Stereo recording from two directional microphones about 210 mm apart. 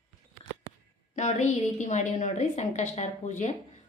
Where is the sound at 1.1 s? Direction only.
35° left (ahead or behind).